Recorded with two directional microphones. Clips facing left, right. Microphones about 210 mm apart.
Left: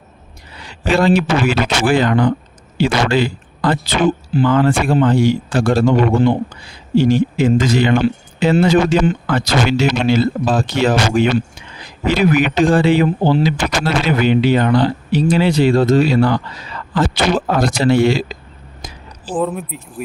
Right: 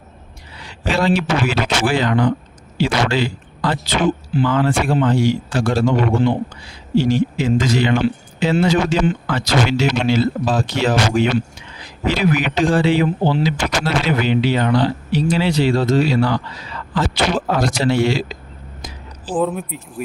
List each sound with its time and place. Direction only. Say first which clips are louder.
0.9 s a man's voice: left 4 dB; 50° left (ahead or behind)
19.3 s speech: even; centre (ahead or behind)